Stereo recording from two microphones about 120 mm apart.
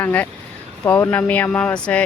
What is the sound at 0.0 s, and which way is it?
Speech, 15° left (ahead or behind).